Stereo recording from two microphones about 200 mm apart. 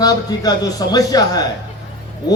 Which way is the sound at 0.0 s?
20° left (ahead or behind).